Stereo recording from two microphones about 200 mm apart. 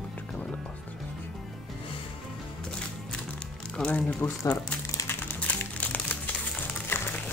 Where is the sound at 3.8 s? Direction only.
5° left (ahead or behind).